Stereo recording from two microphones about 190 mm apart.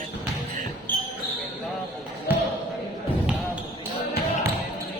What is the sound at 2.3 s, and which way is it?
Basketball bounce, 10° right (ahead or behind).